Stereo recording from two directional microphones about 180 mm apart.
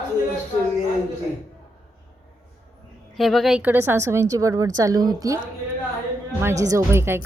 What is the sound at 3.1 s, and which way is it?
A woman's voice, centre (ahead or behind).